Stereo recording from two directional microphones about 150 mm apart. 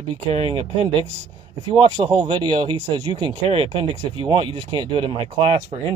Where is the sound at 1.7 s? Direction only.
35° right (ahead or behind).